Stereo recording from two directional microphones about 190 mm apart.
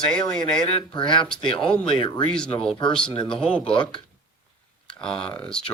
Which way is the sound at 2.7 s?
25° left (ahead or behind).